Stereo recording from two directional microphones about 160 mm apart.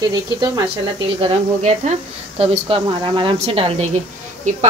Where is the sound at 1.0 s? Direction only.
35° right (ahead or behind).